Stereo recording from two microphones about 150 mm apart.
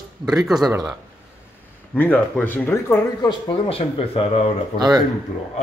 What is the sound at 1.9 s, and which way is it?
Speech, 10° left (ahead or behind).